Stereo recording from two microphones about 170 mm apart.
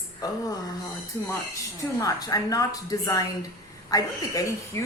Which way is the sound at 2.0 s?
20° left (ahead or behind).